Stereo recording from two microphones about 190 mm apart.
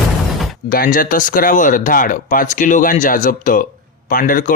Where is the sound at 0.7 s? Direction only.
50° left (ahead or behind).